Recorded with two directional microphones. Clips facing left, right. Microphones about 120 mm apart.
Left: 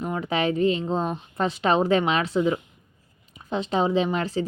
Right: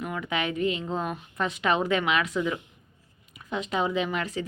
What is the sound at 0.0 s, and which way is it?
A woman's voice, 35° left (ahead or behind).